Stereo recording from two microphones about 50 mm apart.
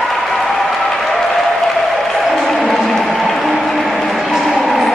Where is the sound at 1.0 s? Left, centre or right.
Centre.